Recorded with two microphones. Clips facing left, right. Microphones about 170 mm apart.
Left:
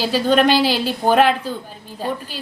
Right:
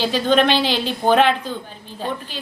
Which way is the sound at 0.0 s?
5° left (ahead or behind).